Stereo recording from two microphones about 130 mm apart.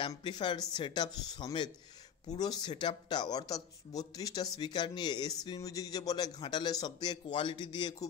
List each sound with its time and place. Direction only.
0.2 s speech: 35° left (ahead or behind)